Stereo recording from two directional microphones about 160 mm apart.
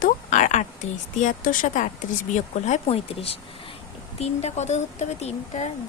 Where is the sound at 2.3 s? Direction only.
45° left (ahead or behind).